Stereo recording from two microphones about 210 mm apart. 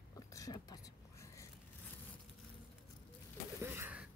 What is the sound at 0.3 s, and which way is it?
Speech, 15° left (ahead or behind).